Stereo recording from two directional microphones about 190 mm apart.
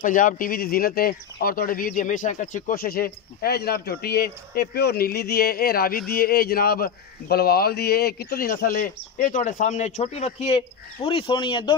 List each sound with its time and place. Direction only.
0.0 s speech: 45° left (ahead or behind); by 11.7 s 25° left (ahead or behind)